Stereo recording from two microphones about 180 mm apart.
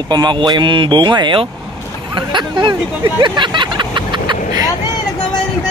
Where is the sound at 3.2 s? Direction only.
25° right (ahead or behind).